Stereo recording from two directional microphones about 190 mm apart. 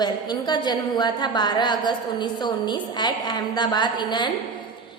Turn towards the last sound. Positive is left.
turn(degrees=25)  # may be behind; listen again after turning